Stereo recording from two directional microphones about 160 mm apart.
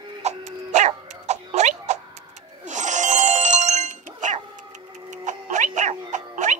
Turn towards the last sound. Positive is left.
turn(degrees=-50)  # may be behind; listen again after turning